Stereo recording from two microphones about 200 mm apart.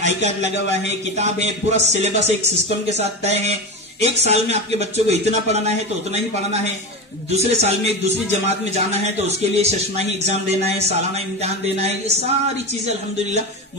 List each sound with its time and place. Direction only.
0.0 s a man's voice: 35° right (ahead or behind)
9.6 s a man's voice: 35° right (ahead or behind)